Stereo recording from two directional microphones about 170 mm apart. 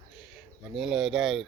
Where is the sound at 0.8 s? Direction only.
Centre (ahead or behind).